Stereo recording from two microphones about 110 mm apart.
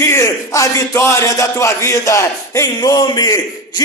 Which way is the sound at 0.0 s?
25° left (ahead or behind).